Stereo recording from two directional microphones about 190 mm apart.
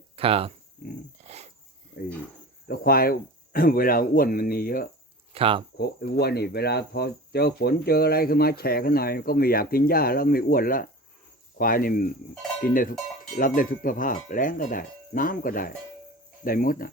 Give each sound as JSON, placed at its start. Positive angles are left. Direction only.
{"t": 0.2, "sound": "speech", "side_deg": -30}
{"t": 1.2, "sound": "a sound", "side_deg": -35}
{"t": 2.6, "sound": "speech", "side_deg": 50}
{"t": 5.3, "sound": "speech", "side_deg": -30}
{"t": 5.7, "sound": "speech", "side_deg": 55}
{"t": 12.3, "sound": "cowbell", "side_deg": 0}
{"t": 12.7, "sound": "speech", "side_deg": 45}